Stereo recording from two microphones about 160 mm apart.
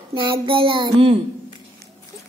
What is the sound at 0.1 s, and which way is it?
A woman's voice, 30° right (ahead or behind).